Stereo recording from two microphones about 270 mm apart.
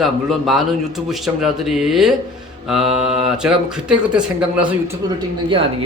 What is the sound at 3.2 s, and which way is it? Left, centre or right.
A man's voice, centre.